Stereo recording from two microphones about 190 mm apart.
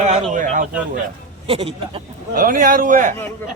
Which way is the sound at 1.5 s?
30° right (ahead or behind).